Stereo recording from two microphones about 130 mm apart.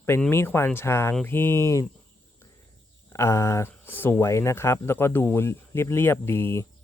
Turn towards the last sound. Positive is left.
turn(degrees=20)  # may be behind; listen again after turning